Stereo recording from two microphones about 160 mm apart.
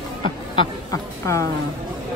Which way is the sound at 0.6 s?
20° left (ahead or behind).